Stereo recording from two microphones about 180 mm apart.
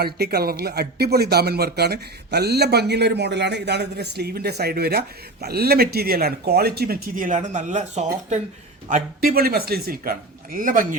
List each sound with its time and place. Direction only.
0.0 s speech: 60° right (ahead or behind); by 8.4 s 40° right (ahead or behind)
8.9 s speech: 55° right (ahead or behind)